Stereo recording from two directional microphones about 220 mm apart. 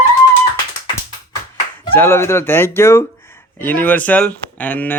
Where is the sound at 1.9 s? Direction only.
10° left (ahead or behind).